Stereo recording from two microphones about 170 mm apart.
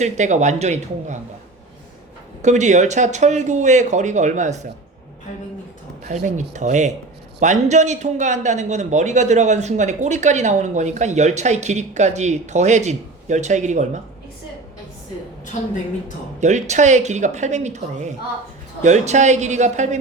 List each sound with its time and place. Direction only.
0.0 s a man's voice: 45° right (ahead or behind)
2.4 s a man's voice: 45° right (ahead or behind)
6.1 s a man's voice: 45° right (ahead or behind)
16.4 s a man's voice: 45° right (ahead or behind)